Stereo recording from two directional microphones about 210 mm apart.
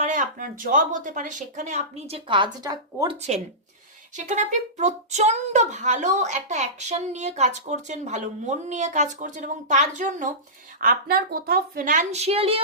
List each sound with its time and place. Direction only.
0.0 s a child's voice: 35° right (ahead or behind); by 3.2 s 20° right (ahead or behind)
3.2 s a child's voice: 30° right (ahead or behind)